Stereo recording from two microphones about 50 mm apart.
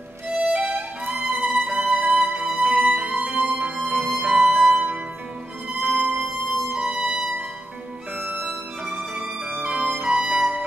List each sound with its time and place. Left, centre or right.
0.3 s music: centre
0.6 s music: right
1.7 s music: right
5.8 s music: right
8.8 s music: right